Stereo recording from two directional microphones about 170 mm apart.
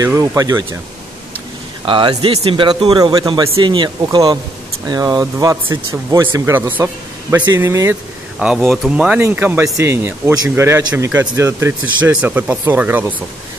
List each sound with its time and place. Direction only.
0.0 s speech: 20° right (ahead or behind)
1.9 s speech: 30° right (ahead or behind)
8.4 s speech: centre (ahead or behind)